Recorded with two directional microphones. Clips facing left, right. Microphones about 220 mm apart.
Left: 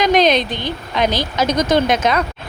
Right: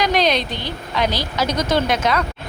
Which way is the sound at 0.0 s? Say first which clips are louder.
Left 4 dB; 20° left (ahead or behind).